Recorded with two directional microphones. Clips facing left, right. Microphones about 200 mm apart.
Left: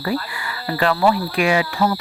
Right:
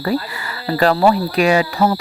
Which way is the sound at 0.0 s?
40° right (ahead or behind).